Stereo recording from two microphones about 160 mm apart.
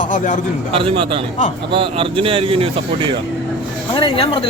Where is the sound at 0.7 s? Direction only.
35° right (ahead or behind).